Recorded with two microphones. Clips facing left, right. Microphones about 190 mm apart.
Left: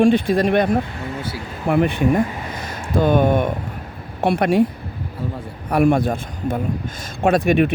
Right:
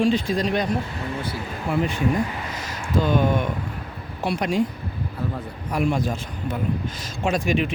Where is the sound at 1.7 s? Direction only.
60° left (ahead or behind).